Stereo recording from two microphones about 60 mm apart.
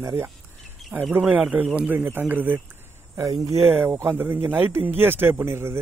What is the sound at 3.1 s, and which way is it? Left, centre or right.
Speech, right.